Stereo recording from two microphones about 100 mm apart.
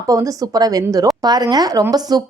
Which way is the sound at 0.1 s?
40° right (ahead or behind).